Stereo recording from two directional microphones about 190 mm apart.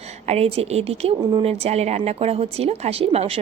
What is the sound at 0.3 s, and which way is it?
A woman's voice, 35° right (ahead or behind).